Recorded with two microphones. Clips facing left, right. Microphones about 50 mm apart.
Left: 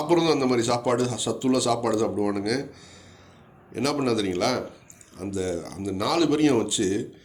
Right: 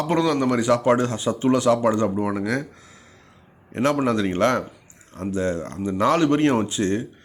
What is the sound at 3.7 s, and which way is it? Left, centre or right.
Speech, right.